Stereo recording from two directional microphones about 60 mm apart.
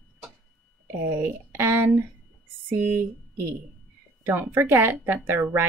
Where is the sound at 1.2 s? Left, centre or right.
Right.